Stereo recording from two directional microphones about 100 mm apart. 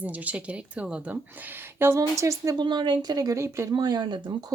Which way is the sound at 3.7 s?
45° right (ahead or behind).